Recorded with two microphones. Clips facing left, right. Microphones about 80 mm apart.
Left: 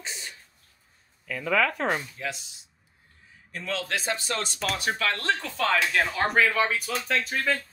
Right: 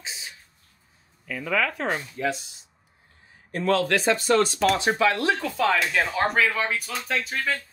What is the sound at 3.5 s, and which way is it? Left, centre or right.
Speech, right.